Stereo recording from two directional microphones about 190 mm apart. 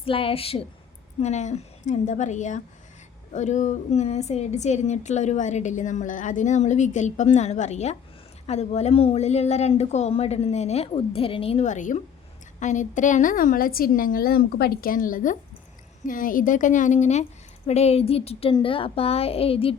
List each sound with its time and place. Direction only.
0.0 s a woman's voice: 30° left (ahead or behind)